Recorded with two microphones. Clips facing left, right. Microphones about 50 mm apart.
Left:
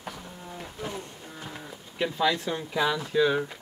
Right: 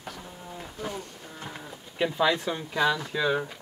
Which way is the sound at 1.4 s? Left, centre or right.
Centre.